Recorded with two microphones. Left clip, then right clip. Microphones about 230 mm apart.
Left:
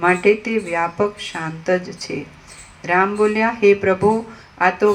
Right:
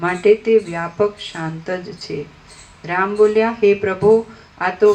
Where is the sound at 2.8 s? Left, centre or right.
Left.